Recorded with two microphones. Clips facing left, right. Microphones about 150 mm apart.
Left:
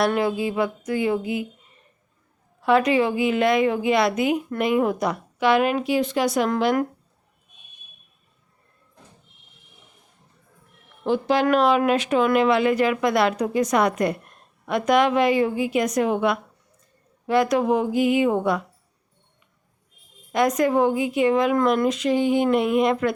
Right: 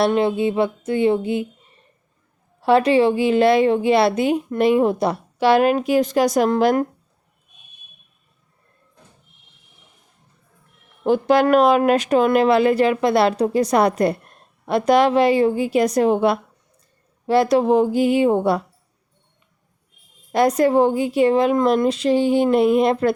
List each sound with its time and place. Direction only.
0.1 s a sound: 25° right (ahead or behind)
2.6 s speech: 30° right (ahead or behind)
11.0 s speech: 45° right (ahead or behind); by 18.6 s 30° right (ahead or behind)
20.3 s speech: 30° right (ahead or behind)